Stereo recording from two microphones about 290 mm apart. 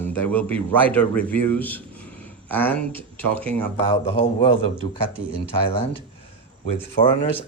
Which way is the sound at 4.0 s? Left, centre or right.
Left.